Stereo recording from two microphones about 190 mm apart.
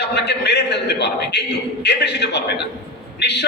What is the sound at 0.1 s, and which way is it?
A man's voice, 60° left (ahead or behind).